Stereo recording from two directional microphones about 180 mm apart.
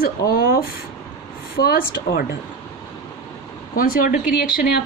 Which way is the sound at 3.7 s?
50° left (ahead or behind).